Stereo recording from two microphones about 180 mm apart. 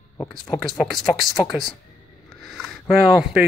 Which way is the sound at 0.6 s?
Centre (ahead or behind).